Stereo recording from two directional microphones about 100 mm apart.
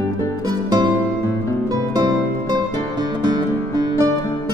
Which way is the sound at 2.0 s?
40° right (ahead or behind).